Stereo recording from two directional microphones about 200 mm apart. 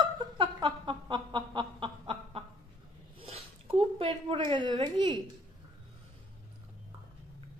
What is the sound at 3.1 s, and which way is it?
Zipper, 30° right (ahead or behind).